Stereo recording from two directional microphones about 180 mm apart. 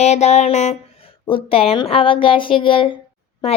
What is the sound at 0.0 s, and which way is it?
A woman's voice, 40° left (ahead or behind).